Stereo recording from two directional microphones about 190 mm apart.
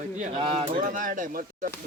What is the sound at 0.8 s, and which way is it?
Speech, 45° right (ahead or behind).